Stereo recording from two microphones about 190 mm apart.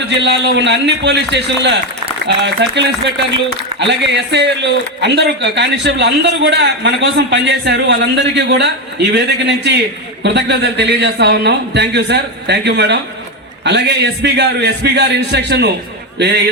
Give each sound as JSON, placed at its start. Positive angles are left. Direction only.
{"t": 0.1, "sound": "a man's voice", "side_deg": -70}